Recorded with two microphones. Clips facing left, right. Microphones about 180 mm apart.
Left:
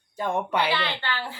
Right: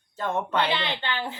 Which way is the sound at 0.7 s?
20° right (ahead or behind).